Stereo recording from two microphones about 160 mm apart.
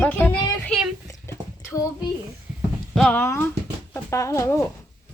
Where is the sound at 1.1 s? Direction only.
15° left (ahead or behind).